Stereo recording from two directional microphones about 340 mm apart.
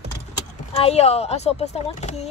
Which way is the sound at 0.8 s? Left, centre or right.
Centre.